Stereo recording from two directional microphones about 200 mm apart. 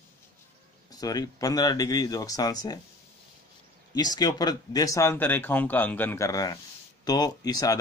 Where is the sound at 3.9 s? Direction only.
20° left (ahead or behind).